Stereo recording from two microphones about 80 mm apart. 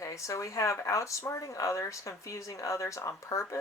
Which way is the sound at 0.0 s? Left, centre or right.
Left.